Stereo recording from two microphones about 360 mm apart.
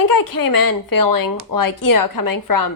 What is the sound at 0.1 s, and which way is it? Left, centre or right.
Speech, left.